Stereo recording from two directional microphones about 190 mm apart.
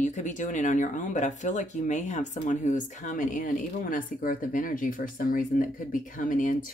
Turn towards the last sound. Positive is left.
turn(degrees=45)  # may be behind; listen again after turning